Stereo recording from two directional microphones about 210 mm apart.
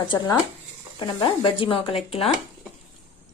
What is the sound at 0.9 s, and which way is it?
Speech, 25° left (ahead or behind).